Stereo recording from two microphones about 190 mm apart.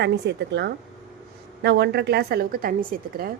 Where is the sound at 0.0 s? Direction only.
65° right (ahead or behind).